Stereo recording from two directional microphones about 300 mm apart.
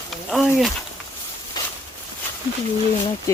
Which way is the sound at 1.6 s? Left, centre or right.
Centre.